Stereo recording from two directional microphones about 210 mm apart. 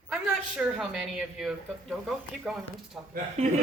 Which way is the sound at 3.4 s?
35° right (ahead or behind).